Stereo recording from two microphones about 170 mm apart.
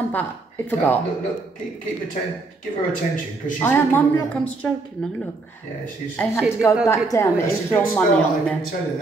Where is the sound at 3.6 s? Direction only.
10° left (ahead or behind).